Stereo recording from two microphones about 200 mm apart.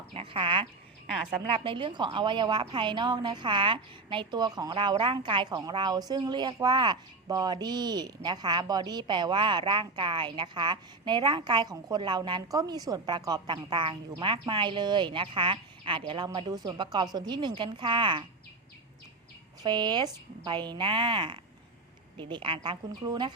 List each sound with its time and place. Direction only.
0.1 s a woman's voice: 25° right (ahead or behind)
19.6 s a woman's voice: 20° right (ahead or behind)